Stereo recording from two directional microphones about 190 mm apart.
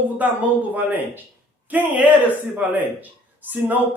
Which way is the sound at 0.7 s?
10° right (ahead or behind).